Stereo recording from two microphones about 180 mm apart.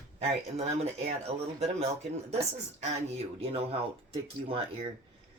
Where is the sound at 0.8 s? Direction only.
35° right (ahead or behind).